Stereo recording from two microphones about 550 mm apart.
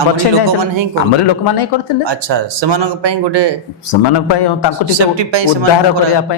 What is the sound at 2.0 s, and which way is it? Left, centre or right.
Speech, right.